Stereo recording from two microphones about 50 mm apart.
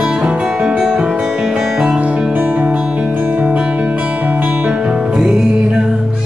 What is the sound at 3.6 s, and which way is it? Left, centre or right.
Music, right.